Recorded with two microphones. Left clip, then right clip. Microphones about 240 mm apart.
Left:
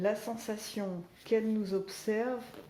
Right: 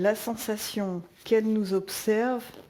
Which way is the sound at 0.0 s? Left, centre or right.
Right.